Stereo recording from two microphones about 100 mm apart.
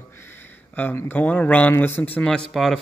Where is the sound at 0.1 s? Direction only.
25° left (ahead or behind).